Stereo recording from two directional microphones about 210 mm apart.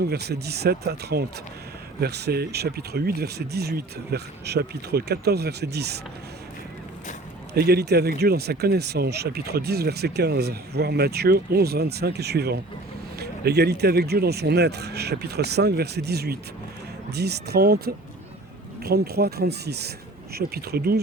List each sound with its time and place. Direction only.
0.0 s speech: 50° right (ahead or behind)
7.5 s speech: 50° right (ahead or behind)